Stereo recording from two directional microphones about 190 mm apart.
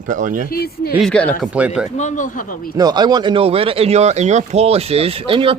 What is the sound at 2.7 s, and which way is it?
Speech, 20° right (ahead or behind).